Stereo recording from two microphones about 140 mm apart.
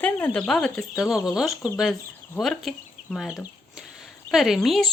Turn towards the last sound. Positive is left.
turn(degrees=0)  # may be behind; listen again after turning